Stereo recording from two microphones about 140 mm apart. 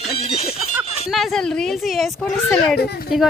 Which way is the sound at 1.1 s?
Centre (ahead or behind).